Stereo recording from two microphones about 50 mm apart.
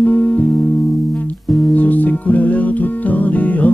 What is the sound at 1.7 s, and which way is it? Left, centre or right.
Music, left.